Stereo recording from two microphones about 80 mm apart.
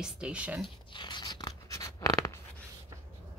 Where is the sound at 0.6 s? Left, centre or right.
Left.